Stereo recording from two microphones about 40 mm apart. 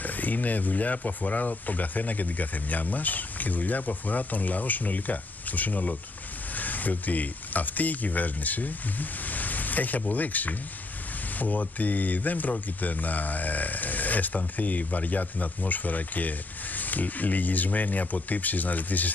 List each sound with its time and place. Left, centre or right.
0.0 s speech: left